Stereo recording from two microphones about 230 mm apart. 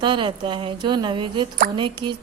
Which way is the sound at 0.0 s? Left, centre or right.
Right.